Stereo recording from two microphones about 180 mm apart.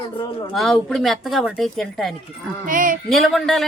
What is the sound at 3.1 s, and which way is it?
Speech, centre (ahead or behind).